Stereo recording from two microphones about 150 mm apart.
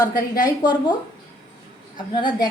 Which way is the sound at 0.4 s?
30° left (ahead or behind).